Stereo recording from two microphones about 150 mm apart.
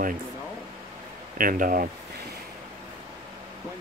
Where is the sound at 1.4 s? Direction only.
70° right (ahead or behind).